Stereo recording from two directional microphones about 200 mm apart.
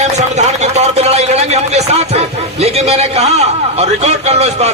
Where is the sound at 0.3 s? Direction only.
35° right (ahead or behind).